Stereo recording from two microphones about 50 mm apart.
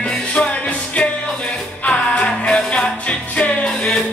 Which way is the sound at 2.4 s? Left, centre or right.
Left.